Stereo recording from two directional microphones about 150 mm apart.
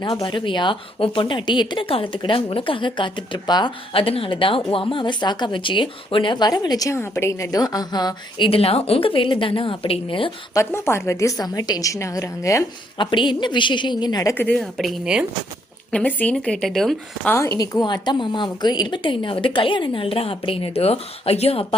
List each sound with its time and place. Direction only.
0.0 s speech: 30° left (ahead or behind)
8.4 s speech: 40° left (ahead or behind)
10.5 s a woman's voice: 20° left (ahead or behind)
13.0 s speech: 30° left (ahead or behind)
14.5 s a woman's voice: centre (ahead or behind)
15.9 s a woman's voice: 10° left (ahead or behind)
17.3 s speech: 20° left (ahead or behind); by 21.8 s 40° left (ahead or behind)